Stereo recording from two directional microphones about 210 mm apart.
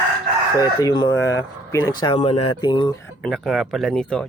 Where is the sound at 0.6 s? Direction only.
15° left (ahead or behind).